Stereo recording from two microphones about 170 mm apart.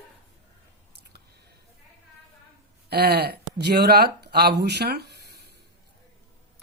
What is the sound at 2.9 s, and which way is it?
Speech, 70° right (ahead or behind).